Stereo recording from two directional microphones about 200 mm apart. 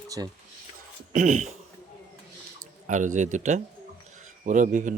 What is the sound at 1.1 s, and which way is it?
Speech, 40° right (ahead or behind).